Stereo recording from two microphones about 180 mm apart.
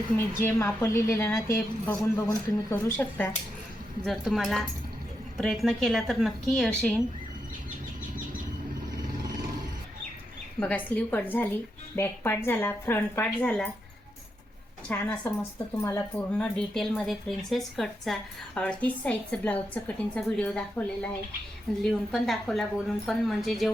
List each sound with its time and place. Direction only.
0.4 s a woman's voice: 15° left (ahead or behind)
2.7 s a woman's voice: 10° left (ahead or behind)
10.6 s a woman's voice: 10° left (ahead or behind)
14.8 s a woman's voice: 10° left (ahead or behind)
16.3 s speech: 5° left (ahead or behind)